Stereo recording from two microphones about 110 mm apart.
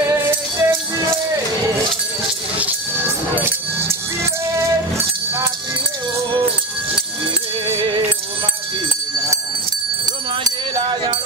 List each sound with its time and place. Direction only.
0.0 s music: 25° right (ahead or behind)
2.6 s music: 20° right (ahead or behind)